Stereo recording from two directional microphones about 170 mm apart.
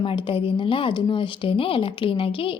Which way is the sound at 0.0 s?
30° left (ahead or behind).